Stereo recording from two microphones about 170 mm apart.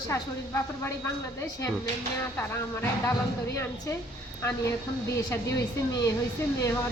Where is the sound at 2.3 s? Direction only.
15° left (ahead or behind).